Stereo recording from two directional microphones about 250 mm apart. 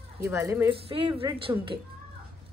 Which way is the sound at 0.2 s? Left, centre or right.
Centre.